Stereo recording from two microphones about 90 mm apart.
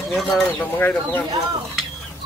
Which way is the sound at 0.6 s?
20° left (ahead or behind).